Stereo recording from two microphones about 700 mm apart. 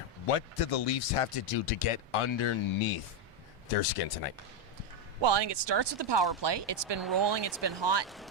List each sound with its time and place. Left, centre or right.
0.3 s speech: left
3.7 s speech: left
5.2 s speech: right
8.0 s speech: centre